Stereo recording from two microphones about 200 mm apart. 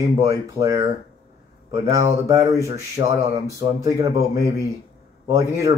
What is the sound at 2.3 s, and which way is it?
Speech, 15° right (ahead or behind).